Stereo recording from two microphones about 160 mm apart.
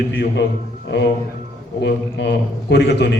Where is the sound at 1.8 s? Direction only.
90° left.